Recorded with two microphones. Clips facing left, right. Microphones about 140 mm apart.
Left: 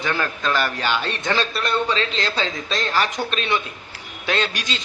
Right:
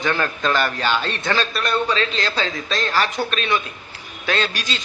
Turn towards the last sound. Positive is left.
turn(degrees=15)  # may be behind; listen again after turning